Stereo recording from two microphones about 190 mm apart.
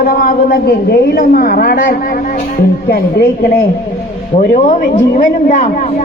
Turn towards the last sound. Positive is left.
turn(degrees=40)  # may be behind; listen again after turning